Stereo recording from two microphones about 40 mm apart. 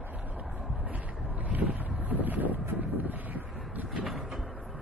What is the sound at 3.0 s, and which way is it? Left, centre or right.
Wind noise, right.